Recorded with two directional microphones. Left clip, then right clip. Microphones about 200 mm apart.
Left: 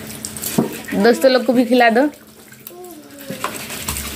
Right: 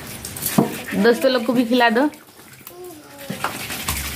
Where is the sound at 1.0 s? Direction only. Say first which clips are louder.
Left 4 dB; 10° left (ahead or behind).